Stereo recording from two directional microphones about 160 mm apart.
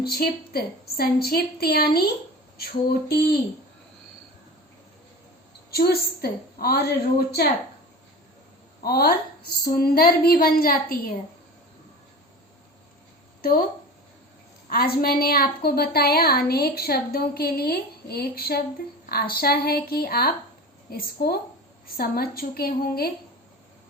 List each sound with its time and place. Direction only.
0.0 s a woman's voice: 75° left (ahead or behind)
5.7 s a woman's voice: 80° left
8.8 s a woman's voice: 75° left (ahead or behind)
13.4 s speech: 65° left (ahead or behind)
14.7 s a woman's voice: 70° left (ahead or behind)